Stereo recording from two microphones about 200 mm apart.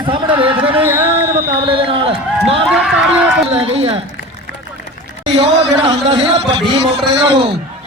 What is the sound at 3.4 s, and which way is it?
Speech, 30° right (ahead or behind).